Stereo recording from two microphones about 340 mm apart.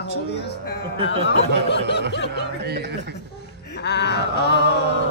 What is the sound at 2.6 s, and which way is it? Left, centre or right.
Speech, right.